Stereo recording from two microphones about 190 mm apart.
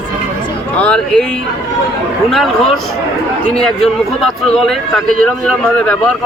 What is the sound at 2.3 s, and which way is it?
A man's voice, centre (ahead or behind).